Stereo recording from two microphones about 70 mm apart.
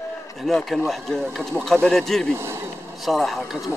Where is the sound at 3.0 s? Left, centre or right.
Centre.